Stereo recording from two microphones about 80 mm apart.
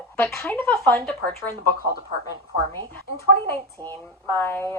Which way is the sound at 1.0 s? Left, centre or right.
Centre.